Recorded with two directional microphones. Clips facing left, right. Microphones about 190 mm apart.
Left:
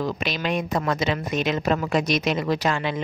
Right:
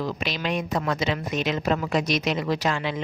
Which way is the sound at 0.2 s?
50° left (ahead or behind).